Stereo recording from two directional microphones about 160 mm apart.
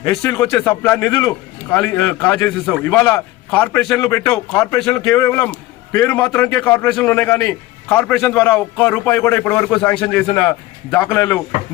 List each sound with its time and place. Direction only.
0.0 s a man's voice: 15° left (ahead or behind)
4.0 s a man's voice: 20° left (ahead or behind)